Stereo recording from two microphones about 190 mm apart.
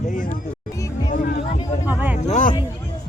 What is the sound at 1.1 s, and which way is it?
Music, 40° left (ahead or behind).